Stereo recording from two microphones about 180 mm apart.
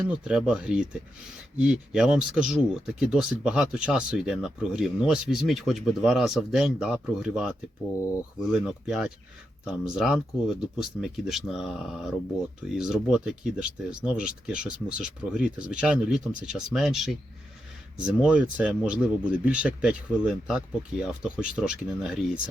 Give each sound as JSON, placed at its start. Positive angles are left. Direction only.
{"t": 0.1, "sound": "speech", "side_deg": -5}
{"t": 7.9, "sound": "speech", "side_deg": 15}
{"t": 8.4, "sound": "speech", "side_deg": -5}